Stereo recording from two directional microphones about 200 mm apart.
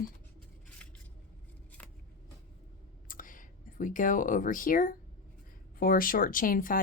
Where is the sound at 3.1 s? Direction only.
40° left (ahead or behind).